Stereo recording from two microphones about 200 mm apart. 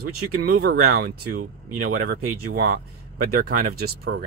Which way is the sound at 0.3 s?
50° right (ahead or behind).